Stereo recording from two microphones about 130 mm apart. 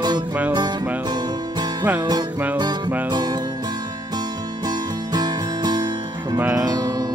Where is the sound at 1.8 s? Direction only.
15° right (ahead or behind).